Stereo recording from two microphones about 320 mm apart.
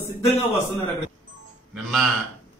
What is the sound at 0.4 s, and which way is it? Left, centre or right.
Speech, centre.